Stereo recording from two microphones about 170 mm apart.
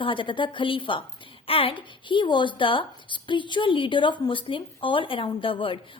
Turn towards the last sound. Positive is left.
turn(degrees=30)  # may be behind; listen again after turning